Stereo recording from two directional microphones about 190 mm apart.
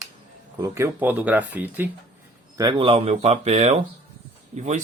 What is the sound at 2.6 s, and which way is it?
Speech, 25° right (ahead or behind).